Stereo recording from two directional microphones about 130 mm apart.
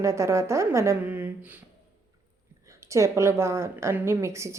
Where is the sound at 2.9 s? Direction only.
25° right (ahead or behind).